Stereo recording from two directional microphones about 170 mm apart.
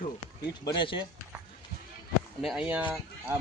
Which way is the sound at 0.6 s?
30° left (ahead or behind).